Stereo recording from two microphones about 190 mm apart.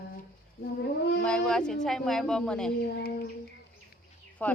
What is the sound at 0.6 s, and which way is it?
Brass instrument, 55° left (ahead or behind).